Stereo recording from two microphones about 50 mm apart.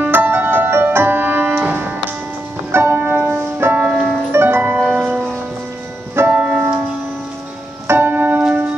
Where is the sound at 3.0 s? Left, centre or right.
Right.